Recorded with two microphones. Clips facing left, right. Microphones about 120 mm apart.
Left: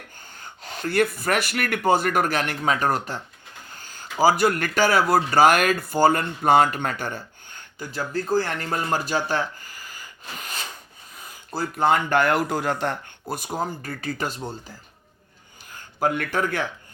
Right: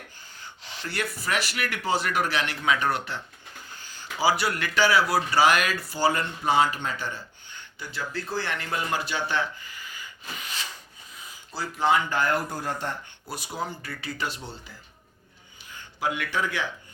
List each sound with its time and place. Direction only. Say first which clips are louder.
0.2 s speech: left 3 dB; 50° left (ahead or behind)
10.4 s rub: left 3 dB; 45° left (ahead or behind)
11.5 s speech: left 3 dB; 55° left (ahead or behind)
15.7 s speech: left 6 dB; 50° left (ahead or behind)